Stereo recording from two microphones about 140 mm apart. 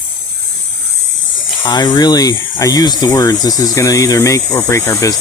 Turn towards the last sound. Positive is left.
turn(degrees=20)  # may be behind; listen again after turning